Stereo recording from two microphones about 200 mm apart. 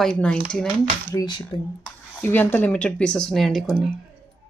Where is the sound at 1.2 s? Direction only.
20° left (ahead or behind).